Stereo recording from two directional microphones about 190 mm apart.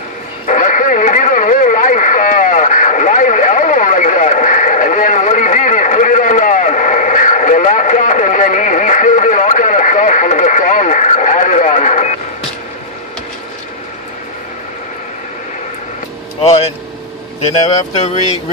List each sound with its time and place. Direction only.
0.5 s radio: 45° left (ahead or behind)
16.4 s vehicle: 35° left (ahead or behind)
17.9 s speech: 35° left (ahead or behind)